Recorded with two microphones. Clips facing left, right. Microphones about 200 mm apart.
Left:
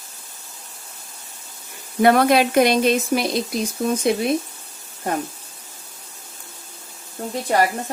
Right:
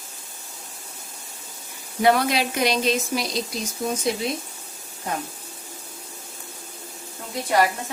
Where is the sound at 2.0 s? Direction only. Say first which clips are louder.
Left 5 dB; 55° left (ahead or behind).